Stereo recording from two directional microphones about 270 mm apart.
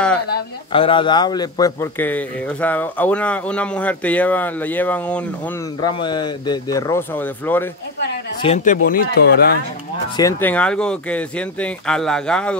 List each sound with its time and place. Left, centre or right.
0.7 s speech: centre
5.8 s speech: centre
8.4 s speech: left
10.1 s speech: centre